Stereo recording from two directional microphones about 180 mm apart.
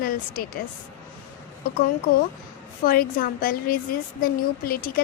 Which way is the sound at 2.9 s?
55° left (ahead or behind).